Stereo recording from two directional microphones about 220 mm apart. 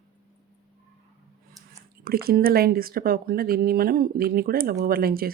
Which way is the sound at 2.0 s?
40° right (ahead or behind).